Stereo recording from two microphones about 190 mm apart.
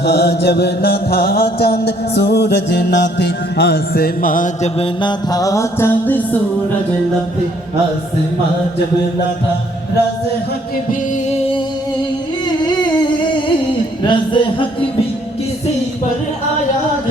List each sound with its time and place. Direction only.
0.0 s chant: 60° left (ahead or behind)
4.8 s music: 20° left (ahead or behind)
14.1 s a sound: 25° left (ahead or behind)